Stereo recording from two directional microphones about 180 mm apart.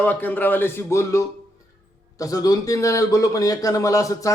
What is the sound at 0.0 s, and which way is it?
A man's voice, 10° left (ahead or behind).